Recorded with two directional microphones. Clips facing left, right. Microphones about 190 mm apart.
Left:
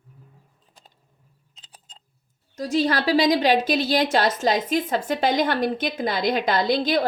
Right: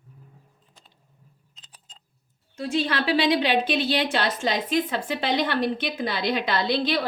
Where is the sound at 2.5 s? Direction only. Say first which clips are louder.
Left 4 dB; 40° left (ahead or behind).